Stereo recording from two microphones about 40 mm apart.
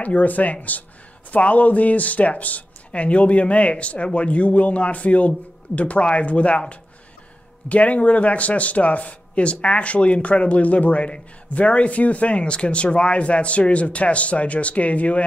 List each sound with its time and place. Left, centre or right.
0.0 s speech: left
7.6 s speech: left